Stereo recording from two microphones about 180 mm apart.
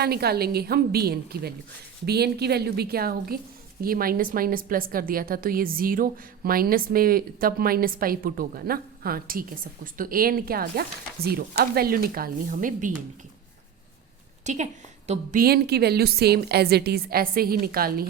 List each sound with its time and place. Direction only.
0.0 s a woman's voice: 60° right (ahead or behind)
14.4 s a woman's voice: 40° right (ahead or behind)
15.4 s a woman's voice: 60° right (ahead or behind)